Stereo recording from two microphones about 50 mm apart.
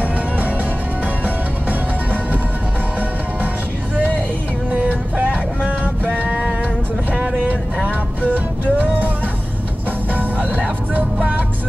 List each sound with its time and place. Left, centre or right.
4.6 s vehicle: right
8.3 s music: right
10.1 s music: right